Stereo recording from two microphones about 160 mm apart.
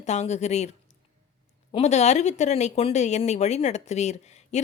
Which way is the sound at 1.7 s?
45° left (ahead or behind).